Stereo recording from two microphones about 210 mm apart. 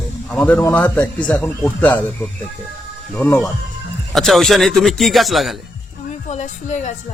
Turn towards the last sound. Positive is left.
turn(degrees=35)  # may be behind; listen again after turning